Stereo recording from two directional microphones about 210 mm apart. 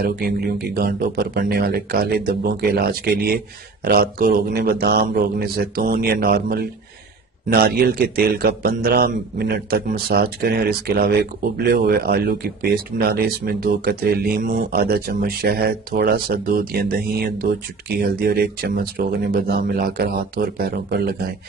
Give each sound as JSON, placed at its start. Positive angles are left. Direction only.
{"t": 0.0, "sound": "a man's voice", "side_deg": -45}